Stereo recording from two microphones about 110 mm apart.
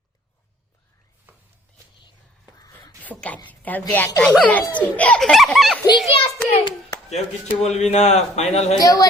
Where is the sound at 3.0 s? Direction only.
15° left (ahead or behind).